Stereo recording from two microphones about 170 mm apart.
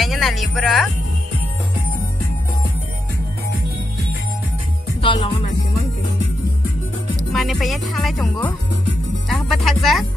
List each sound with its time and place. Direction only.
0.0 s music: centre (ahead or behind)
5.0 s music: 30° left (ahead or behind)
7.3 s speech: centre (ahead or behind)
9.3 s speech: centre (ahead or behind)